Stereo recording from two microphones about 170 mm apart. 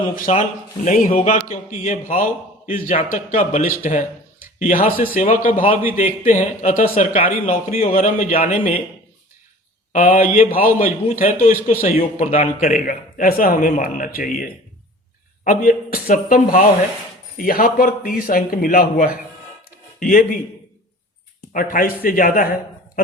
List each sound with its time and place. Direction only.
0.3 s a man's voice: 40° left (ahead or behind)
0.9 s a man's voice: 55° left (ahead or behind)
1.1 s a man's voice: 40° left (ahead or behind)
9.9 s a man's voice: 55° left (ahead or behind)
21.5 s speech: 55° left (ahead or behind)